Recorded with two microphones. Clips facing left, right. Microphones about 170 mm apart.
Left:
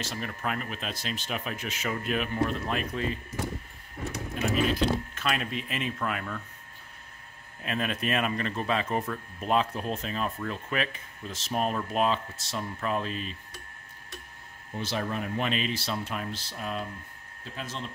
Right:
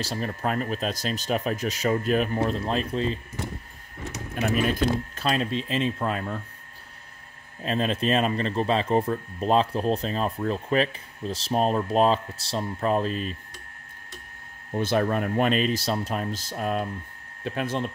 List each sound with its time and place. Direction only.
0.0 s speech: 35° right (ahead or behind)
4.5 s speech: 55° right (ahead or behind)
5.1 s speech: 30° right (ahead or behind)
7.6 s speech: 30° right (ahead or behind)
14.7 s speech: 55° right (ahead or behind)
17.4 s speech: 65° right (ahead or behind)